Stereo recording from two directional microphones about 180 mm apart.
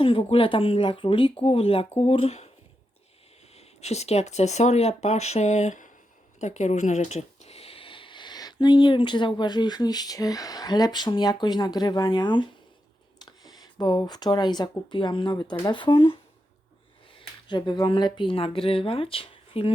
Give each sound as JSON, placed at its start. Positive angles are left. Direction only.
{"t": 0.0, "sound": "speech", "side_deg": 30}
{"t": 3.5, "sound": "speech", "side_deg": 35}
{"t": 17.2, "sound": "speech", "side_deg": 25}